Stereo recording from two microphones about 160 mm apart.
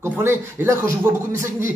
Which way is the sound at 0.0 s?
15° right (ahead or behind).